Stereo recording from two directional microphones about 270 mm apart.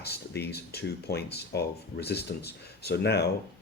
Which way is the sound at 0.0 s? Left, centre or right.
Left.